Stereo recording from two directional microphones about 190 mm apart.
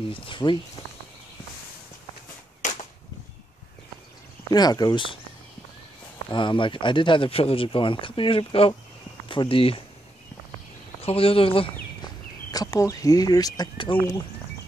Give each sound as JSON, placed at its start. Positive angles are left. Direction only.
{"t": 0.1, "sound": "speech", "side_deg": 25}
{"t": 2.6, "sound": "a sound", "side_deg": 40}
{"t": 4.5, "sound": "speech", "side_deg": 20}
{"t": 6.2, "sound": "speech", "side_deg": 25}
{"t": 11.0, "sound": "speech", "side_deg": 30}